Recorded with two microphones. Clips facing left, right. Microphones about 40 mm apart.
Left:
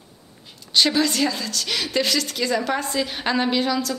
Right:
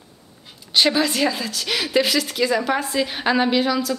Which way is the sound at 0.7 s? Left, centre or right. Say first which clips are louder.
Right 1 dB; centre.